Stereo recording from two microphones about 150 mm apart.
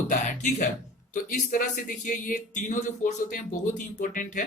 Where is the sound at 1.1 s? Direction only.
60° left (ahead or behind).